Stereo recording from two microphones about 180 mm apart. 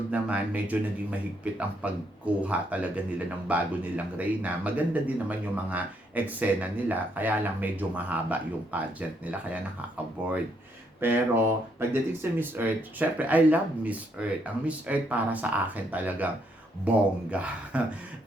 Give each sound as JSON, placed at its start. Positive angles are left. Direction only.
{"t": 0.1, "sound": "speech", "side_deg": -5}